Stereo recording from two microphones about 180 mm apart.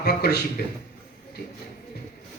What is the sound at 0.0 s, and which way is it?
Speech, 65° left (ahead or behind).